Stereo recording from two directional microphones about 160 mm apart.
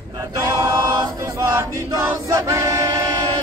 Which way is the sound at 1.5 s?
15° right (ahead or behind).